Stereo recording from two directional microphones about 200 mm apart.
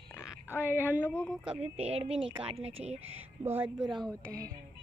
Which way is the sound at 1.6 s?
30° right (ahead or behind).